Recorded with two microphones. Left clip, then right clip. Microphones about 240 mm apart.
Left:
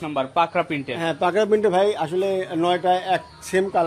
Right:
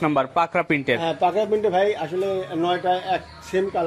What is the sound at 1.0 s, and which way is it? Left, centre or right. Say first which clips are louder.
Speech: even; left.